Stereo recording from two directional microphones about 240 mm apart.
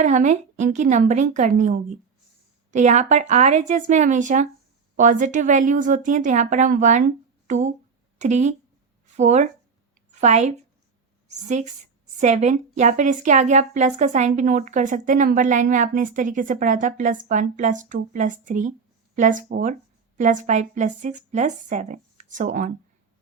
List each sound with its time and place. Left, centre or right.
0.0 s a woman's voice: right